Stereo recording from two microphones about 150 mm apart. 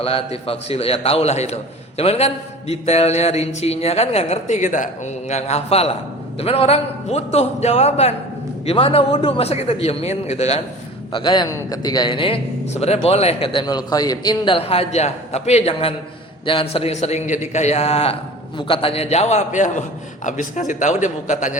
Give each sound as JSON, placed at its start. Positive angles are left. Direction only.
{"t": 0.0, "sound": "a man's voice", "side_deg": 40}
{"t": 11.1, "sound": "a man's voice", "side_deg": 30}
{"t": 12.7, "sound": "a man's voice", "side_deg": 45}